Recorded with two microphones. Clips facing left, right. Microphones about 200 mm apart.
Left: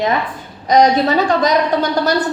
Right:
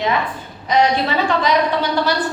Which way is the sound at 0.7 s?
40° left (ahead or behind).